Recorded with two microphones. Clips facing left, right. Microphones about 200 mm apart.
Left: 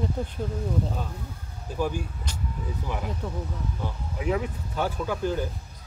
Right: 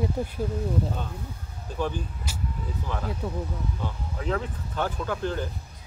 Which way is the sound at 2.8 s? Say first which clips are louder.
Right 2 dB; 15° left (ahead or behind).